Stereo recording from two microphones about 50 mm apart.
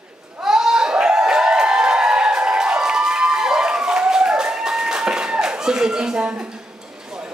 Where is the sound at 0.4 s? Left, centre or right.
Centre.